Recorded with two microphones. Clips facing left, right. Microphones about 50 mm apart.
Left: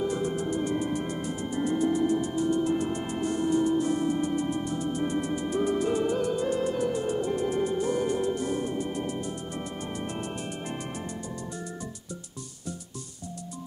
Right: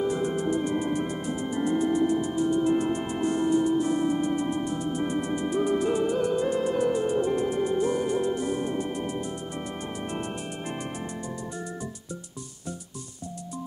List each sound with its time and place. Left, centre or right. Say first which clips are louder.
0.0 s music: right 2 dB; right